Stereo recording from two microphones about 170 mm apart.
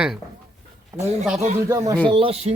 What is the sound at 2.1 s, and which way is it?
Speech, 35° right (ahead or behind).